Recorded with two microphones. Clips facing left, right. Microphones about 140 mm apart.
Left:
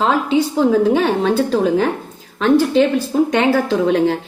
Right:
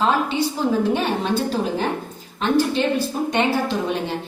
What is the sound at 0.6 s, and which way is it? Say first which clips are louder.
A woman's voice: left 7 dB; 90° left.